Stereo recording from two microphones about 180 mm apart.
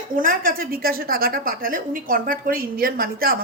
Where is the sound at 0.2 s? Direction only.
50° right (ahead or behind).